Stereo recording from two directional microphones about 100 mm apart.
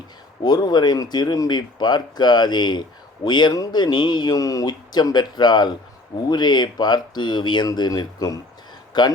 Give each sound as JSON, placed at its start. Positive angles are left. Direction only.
{"t": 0.4, "sound": "speech", "side_deg": 45}